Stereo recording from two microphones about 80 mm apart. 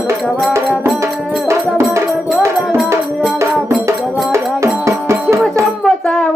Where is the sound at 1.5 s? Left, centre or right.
Right.